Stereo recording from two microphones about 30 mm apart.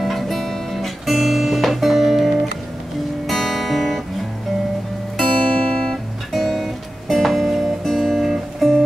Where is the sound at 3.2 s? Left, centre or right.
Centre.